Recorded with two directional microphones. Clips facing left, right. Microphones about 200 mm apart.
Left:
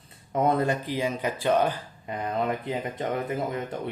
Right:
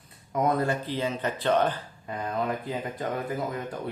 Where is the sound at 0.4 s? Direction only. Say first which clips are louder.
Left 2 dB; 25° left (ahead or behind).